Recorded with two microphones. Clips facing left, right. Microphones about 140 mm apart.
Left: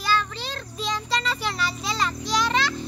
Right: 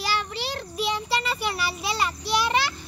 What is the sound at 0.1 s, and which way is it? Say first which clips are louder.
Child singing: left 2 dB; 15° right (ahead or behind).